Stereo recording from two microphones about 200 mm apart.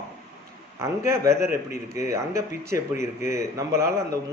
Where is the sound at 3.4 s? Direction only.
15° right (ahead or behind).